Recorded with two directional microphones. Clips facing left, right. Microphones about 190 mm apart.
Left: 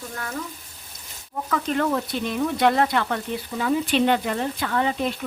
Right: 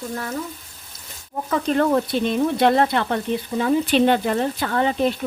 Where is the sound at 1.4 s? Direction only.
35° right (ahead or behind).